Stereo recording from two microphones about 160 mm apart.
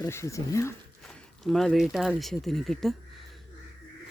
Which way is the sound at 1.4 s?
Centre (ahead or behind).